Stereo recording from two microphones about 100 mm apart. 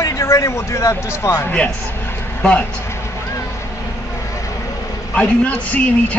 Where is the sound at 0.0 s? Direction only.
30° left (ahead or behind).